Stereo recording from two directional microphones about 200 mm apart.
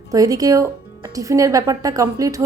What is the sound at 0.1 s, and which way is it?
A woman's voice, 15° right (ahead or behind).